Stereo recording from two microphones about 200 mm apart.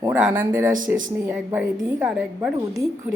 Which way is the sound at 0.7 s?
40° right (ahead or behind).